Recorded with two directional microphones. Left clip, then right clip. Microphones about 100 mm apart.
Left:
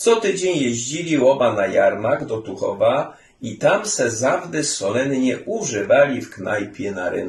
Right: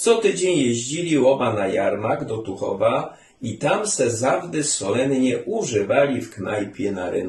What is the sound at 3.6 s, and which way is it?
Speech, 35° right (ahead or behind).